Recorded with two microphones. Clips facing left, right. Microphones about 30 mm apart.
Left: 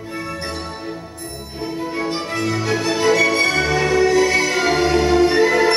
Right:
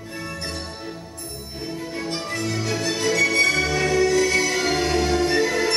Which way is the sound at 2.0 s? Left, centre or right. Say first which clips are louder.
Left 4 dB; centre.